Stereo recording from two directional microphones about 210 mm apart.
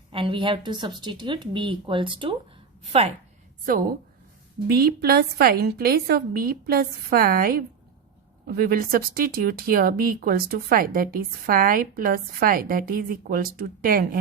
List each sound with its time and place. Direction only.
0.1 s speech: 25° right (ahead or behind)
3.7 s a woman's voice: 40° right (ahead or behind)